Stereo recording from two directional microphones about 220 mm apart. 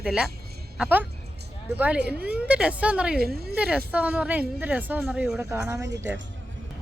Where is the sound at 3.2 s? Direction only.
45° right (ahead or behind).